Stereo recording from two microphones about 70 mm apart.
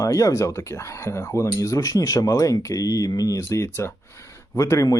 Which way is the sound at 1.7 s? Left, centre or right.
Left.